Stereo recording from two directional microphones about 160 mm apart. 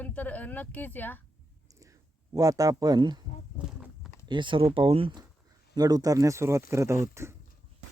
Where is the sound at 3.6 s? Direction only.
5° right (ahead or behind).